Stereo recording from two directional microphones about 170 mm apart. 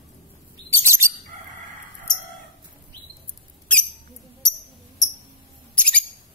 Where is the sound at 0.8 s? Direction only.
15° right (ahead or behind).